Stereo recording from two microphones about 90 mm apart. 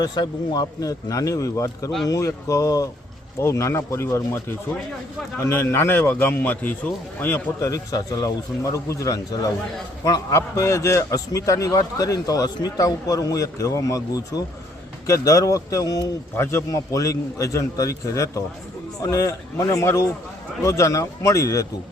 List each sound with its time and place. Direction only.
0.0 s a man's voice: 50° left (ahead or behind); by 7.7 s 25° left (ahead or behind)
7.7 s a man's voice: 40° left (ahead or behind)
16.3 s a man's voice: 30° left (ahead or behind)